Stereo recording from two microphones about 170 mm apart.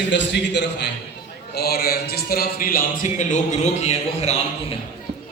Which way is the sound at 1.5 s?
65° left (ahead or behind).